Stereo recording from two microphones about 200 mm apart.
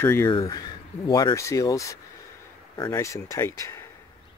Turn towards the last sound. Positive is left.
turn(degrees=15)  # may be behind; listen again after turning